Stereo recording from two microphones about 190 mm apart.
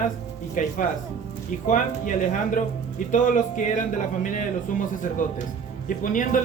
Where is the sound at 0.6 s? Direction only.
45° left (ahead or behind).